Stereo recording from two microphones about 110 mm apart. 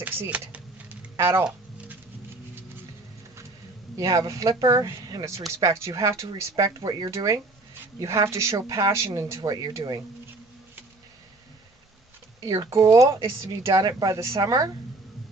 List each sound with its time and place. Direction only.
0.0 s speech: 15° right (ahead or behind)
1.1 s speech: 25° right (ahead or behind)
3.9 s speech: 30° right (ahead or behind)
12.4 s speech: 35° right (ahead or behind)